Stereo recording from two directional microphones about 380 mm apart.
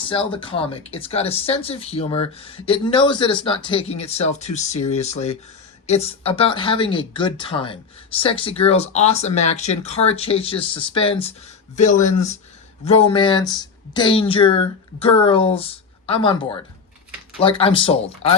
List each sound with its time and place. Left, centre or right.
0.1 s speech: centre
17.4 s speech: centre